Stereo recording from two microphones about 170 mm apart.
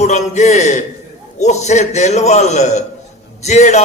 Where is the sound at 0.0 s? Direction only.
40° left (ahead or behind).